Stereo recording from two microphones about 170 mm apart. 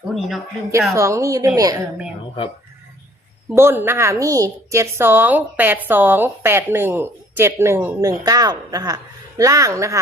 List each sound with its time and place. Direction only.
0.1 s speech: centre (ahead or behind)
0.9 s a woman's voice: 15° right (ahead or behind)
3.5 s a woman's voice: 15° right (ahead or behind)